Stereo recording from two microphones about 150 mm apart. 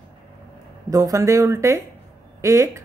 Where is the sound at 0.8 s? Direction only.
20° right (ahead or behind).